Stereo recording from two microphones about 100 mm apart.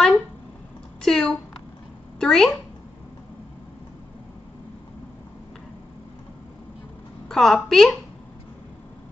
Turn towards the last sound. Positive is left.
turn(degrees=5)  # may be behind; listen again after turning